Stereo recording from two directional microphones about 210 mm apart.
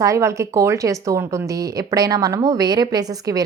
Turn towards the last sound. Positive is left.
turn(degrees=-15)  # may be behind; listen again after turning